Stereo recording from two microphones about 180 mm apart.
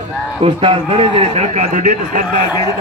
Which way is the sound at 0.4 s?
30° right (ahead or behind).